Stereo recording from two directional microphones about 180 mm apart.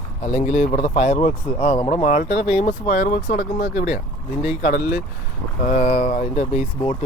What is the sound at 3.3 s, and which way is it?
Speech, 60° left (ahead or behind).